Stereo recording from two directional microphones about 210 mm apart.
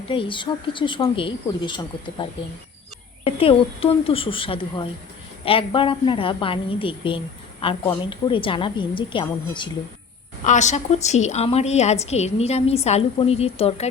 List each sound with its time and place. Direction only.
0.1 s a woman's voice: 25° left (ahead or behind)
3.2 s a woman's voice: 25° left (ahead or behind)
10.4 s a woman's voice: 35° left (ahead or behind)